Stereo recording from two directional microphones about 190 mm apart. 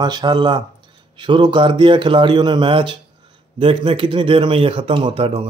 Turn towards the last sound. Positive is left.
turn(degrees=-30)  # may be behind; listen again after turning